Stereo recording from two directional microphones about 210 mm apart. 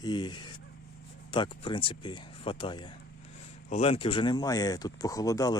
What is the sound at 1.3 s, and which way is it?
Speech, 25° left (ahead or behind).